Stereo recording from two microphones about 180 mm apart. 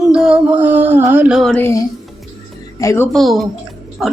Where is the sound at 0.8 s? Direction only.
10° right (ahead or behind).